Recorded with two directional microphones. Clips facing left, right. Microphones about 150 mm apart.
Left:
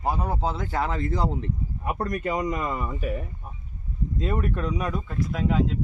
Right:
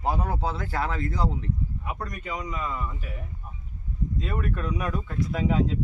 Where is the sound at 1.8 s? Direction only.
50° left (ahead or behind); by 3.1 s 70° left (ahead or behind).